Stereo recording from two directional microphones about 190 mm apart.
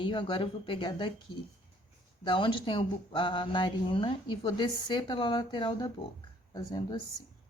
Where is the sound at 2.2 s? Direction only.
25° left (ahead or behind).